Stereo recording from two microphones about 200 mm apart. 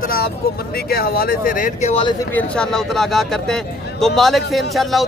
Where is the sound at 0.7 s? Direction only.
50° left (ahead or behind); by 2.1 s 30° left (ahead or behind).